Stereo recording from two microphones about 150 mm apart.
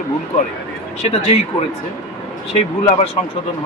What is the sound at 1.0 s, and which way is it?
Speech, 45° left (ahead or behind).